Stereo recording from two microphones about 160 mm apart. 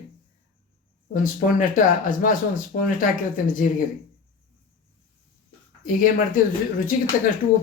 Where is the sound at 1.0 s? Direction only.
55° left (ahead or behind).